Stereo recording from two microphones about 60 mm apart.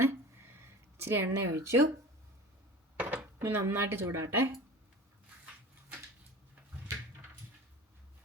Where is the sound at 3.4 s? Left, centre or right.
Right.